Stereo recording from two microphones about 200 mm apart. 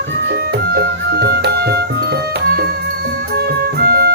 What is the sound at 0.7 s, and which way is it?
Music, 50° right (ahead or behind).